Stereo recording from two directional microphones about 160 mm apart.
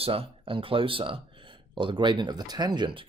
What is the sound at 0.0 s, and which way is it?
Speech, 35° right (ahead or behind).